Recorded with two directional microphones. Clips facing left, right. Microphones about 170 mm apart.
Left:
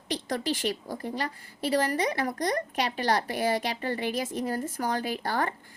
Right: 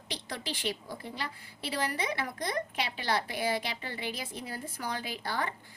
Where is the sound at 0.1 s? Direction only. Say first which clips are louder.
Left 9 dB; 45° left (ahead or behind).